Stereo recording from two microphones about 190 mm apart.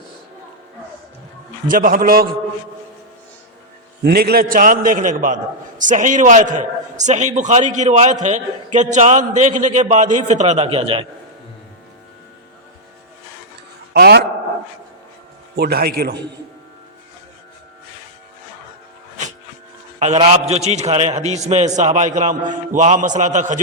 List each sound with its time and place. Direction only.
1.6 s a man's voice: 45° right (ahead or behind)
4.0 s a man's voice: 55° right (ahead or behind); by 11.0 s 30° right (ahead or behind)
13.9 s a man's voice: 60° right (ahead or behind)
15.5 s a man's voice: 55° right (ahead or behind)
20.1 s a man's voice: 30° right (ahead or behind)